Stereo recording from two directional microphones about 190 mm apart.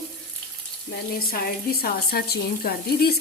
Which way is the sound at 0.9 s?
50° left (ahead or behind).